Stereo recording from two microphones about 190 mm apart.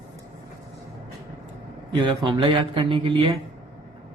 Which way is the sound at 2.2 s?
25° right (ahead or behind).